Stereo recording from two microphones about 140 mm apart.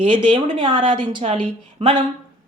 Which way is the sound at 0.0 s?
35° right (ahead or behind).